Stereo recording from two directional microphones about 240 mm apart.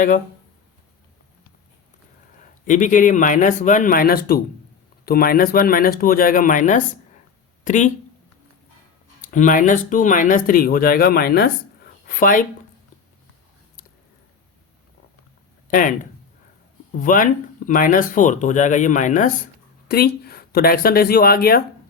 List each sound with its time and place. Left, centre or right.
2.6 s speech: left
9.2 s speech: left
15.7 s speech: left
17.0 s speech: left